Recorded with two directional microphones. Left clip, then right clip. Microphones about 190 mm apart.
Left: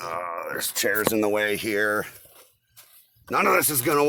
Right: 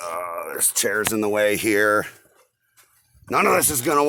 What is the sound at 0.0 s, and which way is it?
Speech, 50° right (ahead or behind).